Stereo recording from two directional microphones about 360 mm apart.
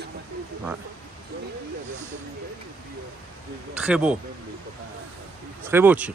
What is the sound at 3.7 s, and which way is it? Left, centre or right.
Speech, centre.